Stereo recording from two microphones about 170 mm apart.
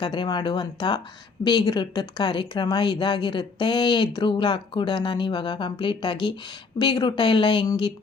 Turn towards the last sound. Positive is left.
turn(degrees=30)  # may be behind; listen again after turning